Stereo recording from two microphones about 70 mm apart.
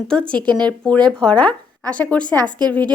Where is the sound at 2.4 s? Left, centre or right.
Right.